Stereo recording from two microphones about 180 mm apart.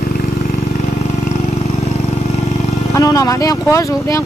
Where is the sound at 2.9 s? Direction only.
20° left (ahead or behind).